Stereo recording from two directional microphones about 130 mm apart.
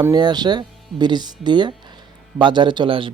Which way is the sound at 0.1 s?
35° right (ahead or behind).